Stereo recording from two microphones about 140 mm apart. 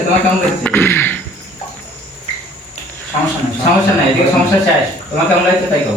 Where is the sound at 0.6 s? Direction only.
15° left (ahead or behind).